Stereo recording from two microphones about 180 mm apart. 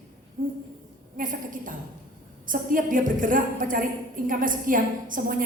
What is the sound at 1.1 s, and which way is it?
A woman's voice, 50° right (ahead or behind).